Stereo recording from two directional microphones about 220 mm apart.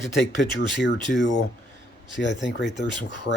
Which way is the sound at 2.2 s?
55° left (ahead or behind).